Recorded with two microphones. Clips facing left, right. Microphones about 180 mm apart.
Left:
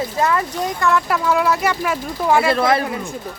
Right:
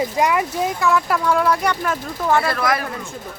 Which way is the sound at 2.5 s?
25° left (ahead or behind).